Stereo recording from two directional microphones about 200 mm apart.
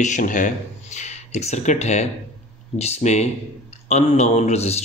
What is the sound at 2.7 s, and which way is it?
A man's voice, 35° left (ahead or behind).